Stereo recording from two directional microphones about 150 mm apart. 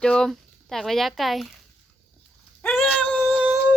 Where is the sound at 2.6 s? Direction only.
10° left (ahead or behind).